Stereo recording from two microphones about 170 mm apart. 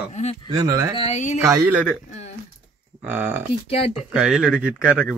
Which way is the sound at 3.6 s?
35° left (ahead or behind).